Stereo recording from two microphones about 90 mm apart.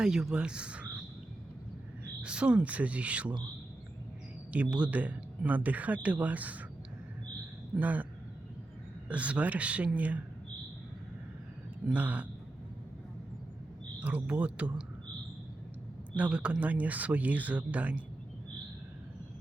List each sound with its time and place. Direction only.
0.0 s speech: 5° right (ahead or behind)
2.2 s speech: 10° right (ahead or behind)
4.5 s speech: 15° right (ahead or behind)
7.8 s speech: 20° right (ahead or behind)
9.0 s speech: 15° right (ahead or behind)
11.9 s speech: 20° right (ahead or behind)
14.0 s speech: 15° right (ahead or behind)
16.1 s speech: 15° right (ahead or behind)